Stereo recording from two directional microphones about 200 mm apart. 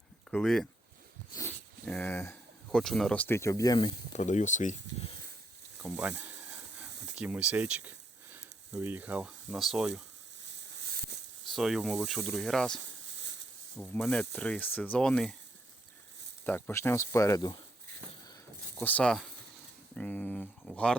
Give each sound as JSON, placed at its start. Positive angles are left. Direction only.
{"t": 0.3, "sound": "speech", "side_deg": 5}
{"t": 4.1, "sound": "speech", "side_deg": 35}
{"t": 5.8, "sound": "a sound", "side_deg": -5}
{"t": 7.2, "sound": "speech", "side_deg": -5}
{"t": 10.4, "sound": "a sound", "side_deg": -60}
{"t": 11.5, "sound": "speech", "side_deg": 0}
{"t": 13.1, "sound": "a sound", "side_deg": -65}
{"t": 13.9, "sound": "speech", "side_deg": 5}
{"t": 16.5, "sound": "speech", "side_deg": 10}
{"t": 18.8, "sound": "speech", "side_deg": 5}